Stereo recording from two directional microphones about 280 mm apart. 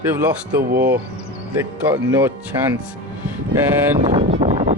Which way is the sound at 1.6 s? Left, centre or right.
Centre.